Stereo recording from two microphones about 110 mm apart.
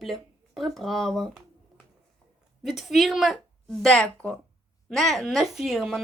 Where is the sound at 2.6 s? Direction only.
5° right (ahead or behind).